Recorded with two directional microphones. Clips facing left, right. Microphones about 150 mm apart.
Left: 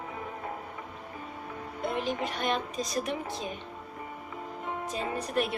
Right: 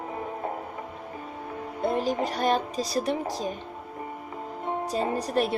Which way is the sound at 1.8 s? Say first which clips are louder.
Right 5 dB; 35° right (ahead or behind).